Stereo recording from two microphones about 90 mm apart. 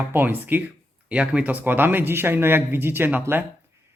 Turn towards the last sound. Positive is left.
turn(degrees=-25)  # may be behind; listen again after turning